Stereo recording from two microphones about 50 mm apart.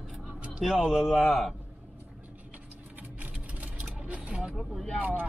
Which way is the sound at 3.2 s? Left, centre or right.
Right.